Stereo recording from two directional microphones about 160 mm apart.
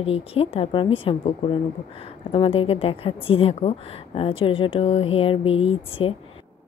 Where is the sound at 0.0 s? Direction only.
35° left (ahead or behind).